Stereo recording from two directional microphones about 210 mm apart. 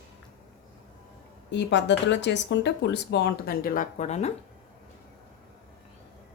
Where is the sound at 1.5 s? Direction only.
55° left (ahead or behind); by 4.3 s 30° left (ahead or behind).